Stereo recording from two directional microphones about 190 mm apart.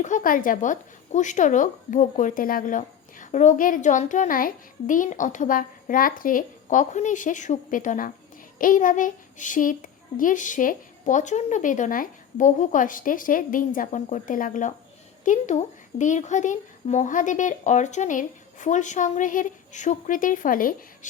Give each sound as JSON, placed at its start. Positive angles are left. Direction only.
{"t": 0.0, "sound": "speech", "side_deg": 45}